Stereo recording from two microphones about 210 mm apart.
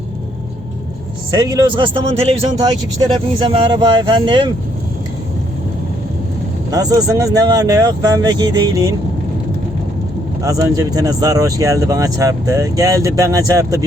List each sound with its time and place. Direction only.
1.3 s a man's voice: 20° right (ahead or behind)
6.7 s speech: 15° right (ahead or behind)
10.4 s speech: 15° right (ahead or behind)